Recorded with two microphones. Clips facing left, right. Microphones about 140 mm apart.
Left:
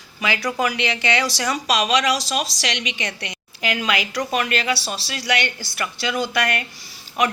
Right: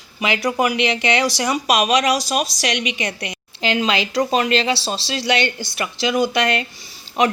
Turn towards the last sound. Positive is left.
turn(degrees=-25)  # may be behind; listen again after turning